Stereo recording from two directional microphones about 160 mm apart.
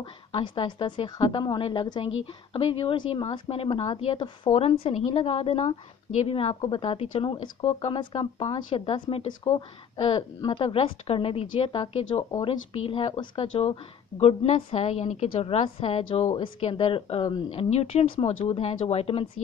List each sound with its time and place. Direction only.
0.0 s a woman's voice: 30° left (ahead or behind)